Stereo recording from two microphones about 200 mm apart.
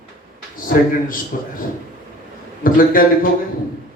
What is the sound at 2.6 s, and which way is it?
Speech, 45° left (ahead or behind).